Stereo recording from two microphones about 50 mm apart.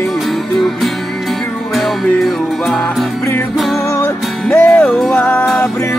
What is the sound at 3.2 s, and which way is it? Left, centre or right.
Music, left.